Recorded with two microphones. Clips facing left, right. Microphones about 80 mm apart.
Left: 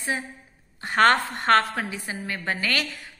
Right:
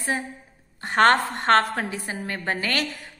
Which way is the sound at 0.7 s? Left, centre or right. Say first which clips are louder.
Right 1 dB; right.